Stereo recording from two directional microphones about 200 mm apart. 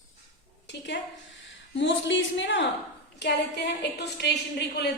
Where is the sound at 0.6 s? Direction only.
60° left (ahead or behind).